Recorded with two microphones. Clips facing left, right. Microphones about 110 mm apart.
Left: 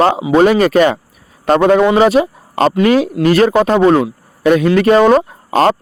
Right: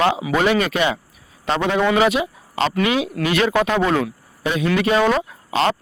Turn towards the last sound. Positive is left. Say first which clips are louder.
# left 7 dB
turn(degrees=45)  # may be behind; listen again after turning